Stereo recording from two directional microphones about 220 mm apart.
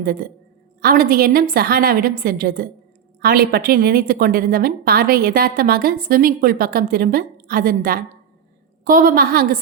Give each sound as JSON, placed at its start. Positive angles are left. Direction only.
{"t": 0.0, "sound": "a woman's voice", "side_deg": -40}